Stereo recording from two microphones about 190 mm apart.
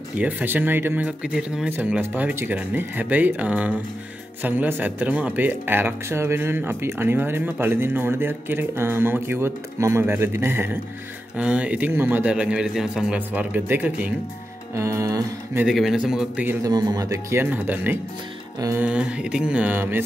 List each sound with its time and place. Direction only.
0.2 s speech: 10° right (ahead or behind)
15.6 s a man's voice: centre (ahead or behind)
16.6 s speech: 20° right (ahead or behind)